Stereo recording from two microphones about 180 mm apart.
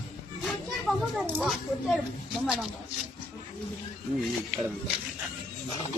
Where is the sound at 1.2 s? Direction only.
5° right (ahead or behind).